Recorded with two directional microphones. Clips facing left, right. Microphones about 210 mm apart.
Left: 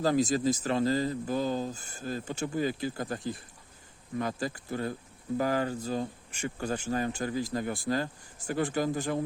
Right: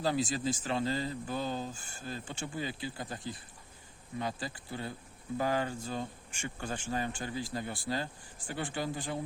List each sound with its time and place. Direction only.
0.0 s speech: 40° left (ahead or behind)